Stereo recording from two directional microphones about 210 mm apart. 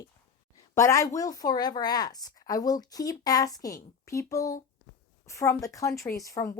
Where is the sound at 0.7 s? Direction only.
15° left (ahead or behind).